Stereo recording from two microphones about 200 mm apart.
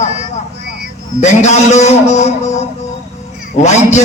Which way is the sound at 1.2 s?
35° left (ahead or behind).